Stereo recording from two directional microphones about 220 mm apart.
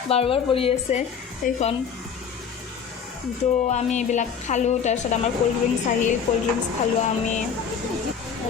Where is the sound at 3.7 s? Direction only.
30° left (ahead or behind).